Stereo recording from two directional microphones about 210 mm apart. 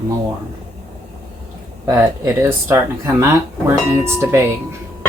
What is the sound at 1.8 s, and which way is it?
Speech, 10° right (ahead or behind).